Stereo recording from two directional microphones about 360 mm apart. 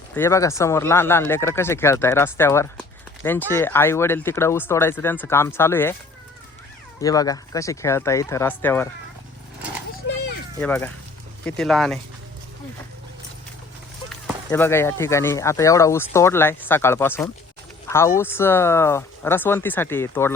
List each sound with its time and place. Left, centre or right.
0.2 s speech: centre
7.0 s speech: centre
10.6 s speech: centre
14.5 s speech: centre